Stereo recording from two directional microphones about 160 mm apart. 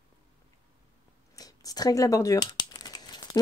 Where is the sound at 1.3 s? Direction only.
25° left (ahead or behind).